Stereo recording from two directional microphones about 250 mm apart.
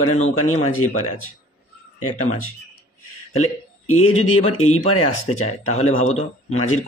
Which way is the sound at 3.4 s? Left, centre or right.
Left.